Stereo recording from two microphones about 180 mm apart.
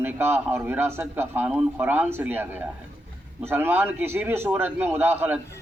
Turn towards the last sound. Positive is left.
turn(degrees=-10)  # may be behind; listen again after turning